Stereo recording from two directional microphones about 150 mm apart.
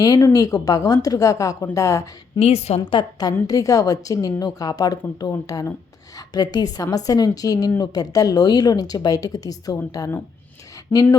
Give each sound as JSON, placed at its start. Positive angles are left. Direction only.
{"t": 0.0, "sound": "a woman's voice", "side_deg": 20}
{"t": 2.4, "sound": "a woman's voice", "side_deg": 45}
{"t": 2.9, "sound": "a woman's voice", "side_deg": 25}